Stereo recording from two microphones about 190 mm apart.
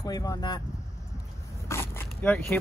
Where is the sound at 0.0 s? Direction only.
20° left (ahead or behind).